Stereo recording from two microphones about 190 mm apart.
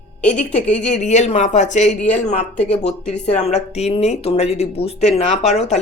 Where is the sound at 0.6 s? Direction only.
5° left (ahead or behind).